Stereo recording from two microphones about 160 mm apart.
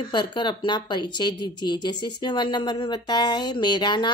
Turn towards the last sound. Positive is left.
turn(degrees=30)  # may be behind; listen again after turning